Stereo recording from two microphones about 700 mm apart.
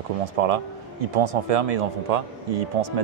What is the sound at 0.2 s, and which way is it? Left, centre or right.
A man's voice, right.